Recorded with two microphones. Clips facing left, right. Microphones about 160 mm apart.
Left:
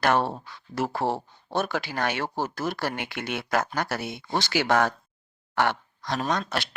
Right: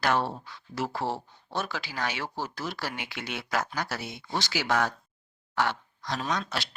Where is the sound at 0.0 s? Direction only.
55° left (ahead or behind).